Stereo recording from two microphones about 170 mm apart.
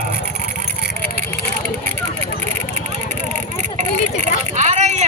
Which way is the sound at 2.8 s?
45° right (ahead or behind).